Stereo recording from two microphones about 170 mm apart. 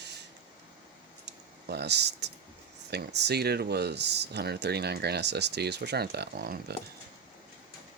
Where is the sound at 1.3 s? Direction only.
80° right.